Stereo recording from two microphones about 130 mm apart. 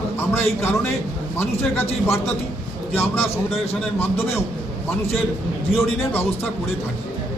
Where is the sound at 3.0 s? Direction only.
15° left (ahead or behind).